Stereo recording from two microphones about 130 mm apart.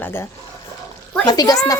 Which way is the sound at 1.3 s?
30° left (ahead or behind).